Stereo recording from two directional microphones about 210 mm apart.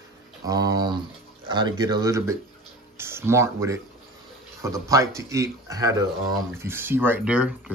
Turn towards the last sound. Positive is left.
turn(degrees=-5)  # may be behind; listen again after turning